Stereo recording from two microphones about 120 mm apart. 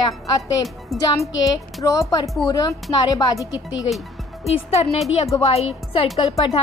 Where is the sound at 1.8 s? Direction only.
30° left (ahead or behind).